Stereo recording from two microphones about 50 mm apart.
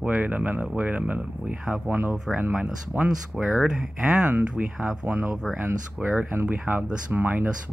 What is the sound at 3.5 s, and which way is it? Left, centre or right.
Speech, centre.